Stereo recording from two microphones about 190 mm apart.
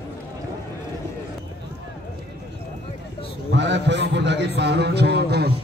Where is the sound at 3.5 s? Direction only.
70° right (ahead or behind).